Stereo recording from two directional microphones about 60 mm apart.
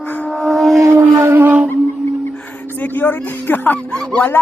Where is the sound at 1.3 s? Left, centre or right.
Right.